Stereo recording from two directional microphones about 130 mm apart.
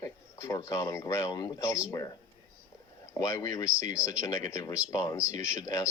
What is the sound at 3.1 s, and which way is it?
Speech, 25° left (ahead or behind).